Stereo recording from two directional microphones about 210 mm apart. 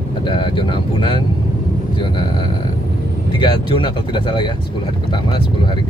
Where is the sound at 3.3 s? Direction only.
20° left (ahead or behind).